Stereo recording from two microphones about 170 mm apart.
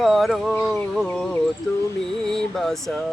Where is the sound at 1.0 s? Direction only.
10° left (ahead or behind).